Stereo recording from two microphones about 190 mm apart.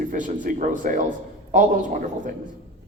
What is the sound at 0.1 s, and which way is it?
A man's voice, 45° right (ahead or behind).